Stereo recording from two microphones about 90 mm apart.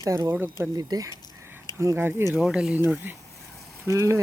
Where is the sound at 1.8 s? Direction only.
30° right (ahead or behind).